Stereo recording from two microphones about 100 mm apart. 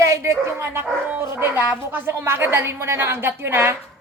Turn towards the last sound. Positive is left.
turn(degrees=-25)  # may be behind; listen again after turning